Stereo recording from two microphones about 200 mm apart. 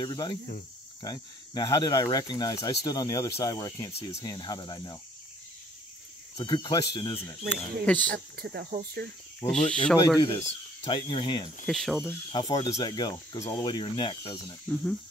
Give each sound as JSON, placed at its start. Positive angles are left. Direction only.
{"t": 0.0, "sound": "speech", "side_deg": 20}
{"t": 6.3, "sound": "speech", "side_deg": 20}
{"t": 8.1, "sound": "speech", "side_deg": -50}
{"t": 9.5, "sound": "speech", "side_deg": 5}
{"t": 10.9, "sound": "speech", "side_deg": 25}
{"t": 11.6, "sound": "speech", "side_deg": 0}
{"t": 12.3, "sound": "speech", "side_deg": 20}
{"t": 14.7, "sound": "speech", "side_deg": 5}